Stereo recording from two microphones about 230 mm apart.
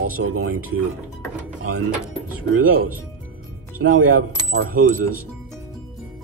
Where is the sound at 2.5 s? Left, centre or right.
Right.